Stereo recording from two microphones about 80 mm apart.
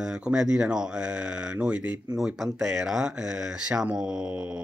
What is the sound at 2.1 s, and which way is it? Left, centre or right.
Speech, centre.